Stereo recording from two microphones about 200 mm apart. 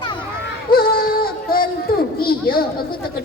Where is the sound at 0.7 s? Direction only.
50° left (ahead or behind).